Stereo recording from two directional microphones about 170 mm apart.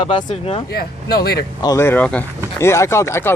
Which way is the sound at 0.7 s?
65° left (ahead or behind).